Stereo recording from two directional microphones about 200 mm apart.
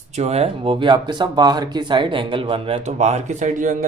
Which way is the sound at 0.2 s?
30° right (ahead or behind).